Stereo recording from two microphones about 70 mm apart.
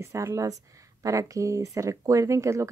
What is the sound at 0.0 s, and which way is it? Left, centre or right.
Speech, right.